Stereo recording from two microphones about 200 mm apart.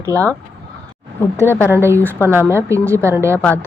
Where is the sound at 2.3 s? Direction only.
10° right (ahead or behind).